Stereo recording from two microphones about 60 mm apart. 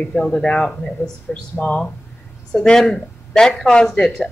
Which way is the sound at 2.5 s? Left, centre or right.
Centre.